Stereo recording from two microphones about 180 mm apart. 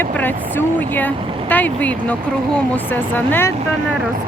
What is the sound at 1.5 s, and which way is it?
Speech, 10° left (ahead or behind).